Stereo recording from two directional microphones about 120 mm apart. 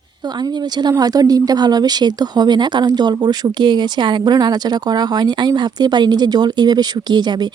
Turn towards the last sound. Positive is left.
turn(degrees=-35)  # may be behind; listen again after turning